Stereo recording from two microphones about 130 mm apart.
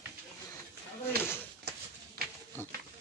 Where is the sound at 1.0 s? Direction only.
20° left (ahead or behind).